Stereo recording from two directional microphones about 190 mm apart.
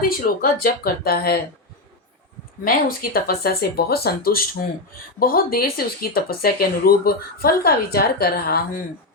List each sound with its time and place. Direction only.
0.0 s speech: 50° left (ahead or behind)
2.6 s speech: 50° left (ahead or behind)